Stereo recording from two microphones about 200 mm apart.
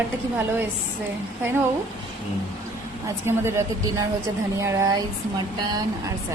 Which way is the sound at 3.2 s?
10° right (ahead or behind).